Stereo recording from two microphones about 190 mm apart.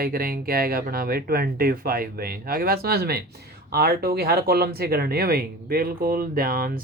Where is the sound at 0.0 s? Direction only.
50° right (ahead or behind).